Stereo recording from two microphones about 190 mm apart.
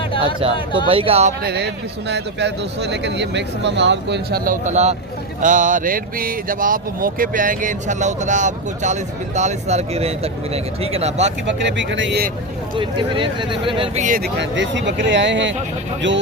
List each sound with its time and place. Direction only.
0.1 s a sound: 25° left (ahead or behind)
0.9 s speech: 30° right (ahead or behind)
1.4 s speech: 60° right (ahead or behind); by 11.3 s 35° right (ahead or behind)
11.4 s speech: 70° right (ahead or behind)
12.7 s speech: 25° right (ahead or behind)
14.0 s speech: 45° right (ahead or behind)
14.3 s speech: 70° right (ahead or behind)